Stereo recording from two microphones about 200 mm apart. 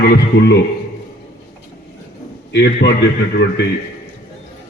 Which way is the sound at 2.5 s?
60° left (ahead or behind).